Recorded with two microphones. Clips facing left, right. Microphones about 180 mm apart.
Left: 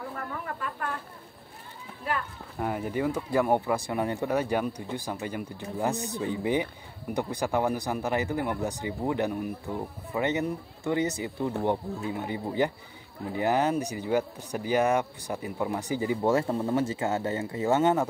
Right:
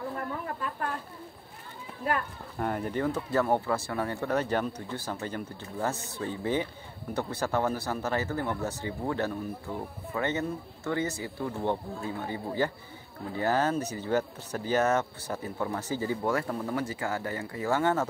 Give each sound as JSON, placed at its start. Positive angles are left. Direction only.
{"t": 2.6, "sound": "a man's voice", "side_deg": 5}